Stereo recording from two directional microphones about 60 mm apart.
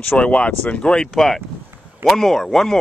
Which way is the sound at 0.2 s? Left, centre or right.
Centre.